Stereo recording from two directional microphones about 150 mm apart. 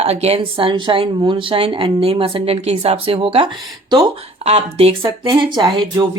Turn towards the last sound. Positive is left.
turn(degrees=-35)  # may be behind; listen again after turning